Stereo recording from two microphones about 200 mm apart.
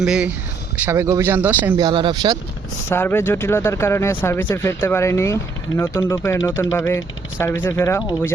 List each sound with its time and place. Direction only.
0.0 s speech: 5° right (ahead or behind)
0.9 s speech: 15° right (ahead or behind)
1.7 s speech: 25° right (ahead or behind)
2.9 s speech: 10° left (ahead or behind)